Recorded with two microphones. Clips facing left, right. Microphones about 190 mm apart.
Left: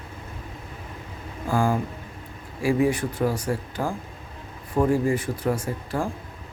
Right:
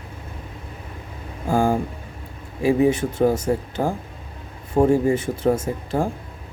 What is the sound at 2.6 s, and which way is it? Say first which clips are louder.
Speech: right 4 dB; 25° right (ahead or behind).